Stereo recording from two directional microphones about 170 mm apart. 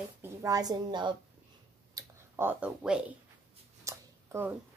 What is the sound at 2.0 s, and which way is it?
Speech, 15° right (ahead or behind).